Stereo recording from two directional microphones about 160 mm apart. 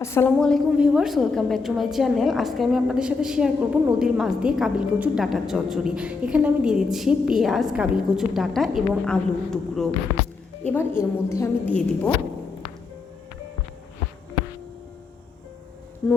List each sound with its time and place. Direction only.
0.0 s a woman's voice: 15° left (ahead or behind)
0.3 s a woman's voice: centre (ahead or behind)
10.7 s a woman's voice: 15° left (ahead or behind)